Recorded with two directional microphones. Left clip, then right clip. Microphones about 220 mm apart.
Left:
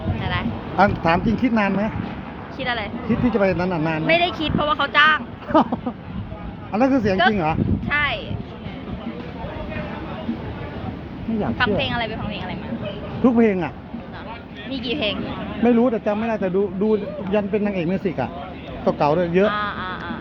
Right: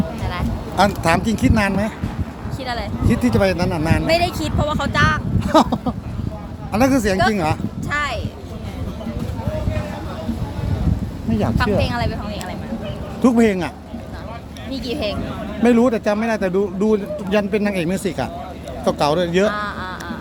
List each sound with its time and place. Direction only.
0.2 s a sound: 10° right (ahead or behind)
1.5 s a man's voice: centre (ahead or behind)
11.5 s a man's voice: 15° right (ahead or behind)
13.2 s speech: 5° right (ahead or behind)
14.7 s a man's voice: 10° right (ahead or behind)